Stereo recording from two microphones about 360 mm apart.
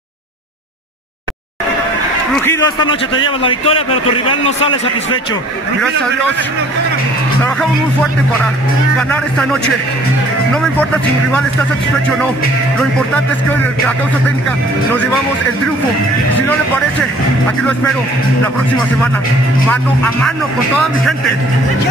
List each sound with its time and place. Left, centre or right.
2.3 s a man's voice: centre
9.1 s speech: centre
13.1 s speech: centre
19.7 s speech: centre